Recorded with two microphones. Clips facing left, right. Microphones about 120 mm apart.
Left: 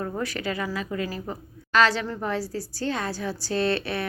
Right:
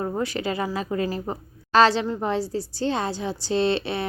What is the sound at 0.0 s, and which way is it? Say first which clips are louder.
A woman's voice: right 3 dB; 25° right (ahead or behind).